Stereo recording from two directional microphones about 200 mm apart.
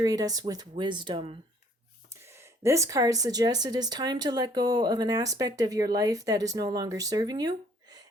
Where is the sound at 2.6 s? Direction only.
15° right (ahead or behind).